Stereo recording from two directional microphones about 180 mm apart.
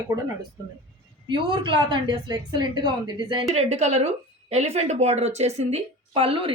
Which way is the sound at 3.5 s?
35° right (ahead or behind).